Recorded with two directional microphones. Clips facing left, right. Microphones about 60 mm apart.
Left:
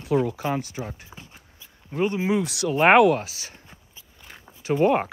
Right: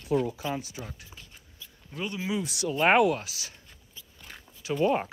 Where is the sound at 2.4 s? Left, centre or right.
Left.